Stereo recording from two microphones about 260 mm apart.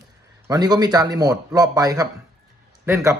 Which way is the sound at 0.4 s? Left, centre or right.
Centre.